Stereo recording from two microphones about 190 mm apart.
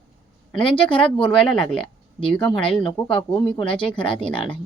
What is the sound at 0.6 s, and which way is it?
Speech, 25° left (ahead or behind).